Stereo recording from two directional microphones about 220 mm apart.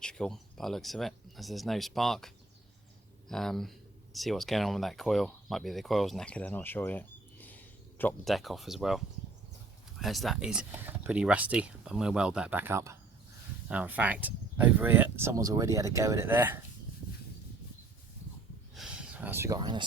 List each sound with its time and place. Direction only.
0.0 s speech: 5° left (ahead or behind)
10.0 s speech: centre (ahead or behind)
18.7 s a sound: 5° right (ahead or behind); by 19.8 s 20° right (ahead or behind)